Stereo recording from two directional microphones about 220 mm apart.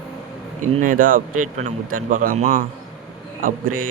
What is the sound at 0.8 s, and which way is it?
Speech, 40° right (ahead or behind).